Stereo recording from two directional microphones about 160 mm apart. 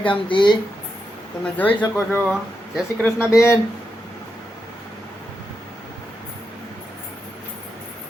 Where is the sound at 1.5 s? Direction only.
10° left (ahead or behind).